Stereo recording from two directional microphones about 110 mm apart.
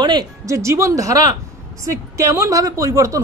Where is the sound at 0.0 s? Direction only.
40° right (ahead or behind).